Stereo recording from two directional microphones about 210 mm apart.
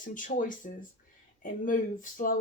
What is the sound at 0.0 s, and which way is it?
Speech, 40° left (ahead or behind).